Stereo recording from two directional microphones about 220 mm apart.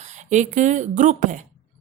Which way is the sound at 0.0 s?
30° right (ahead or behind).